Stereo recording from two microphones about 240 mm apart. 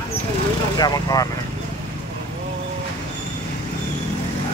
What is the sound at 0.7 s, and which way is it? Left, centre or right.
Speech, centre.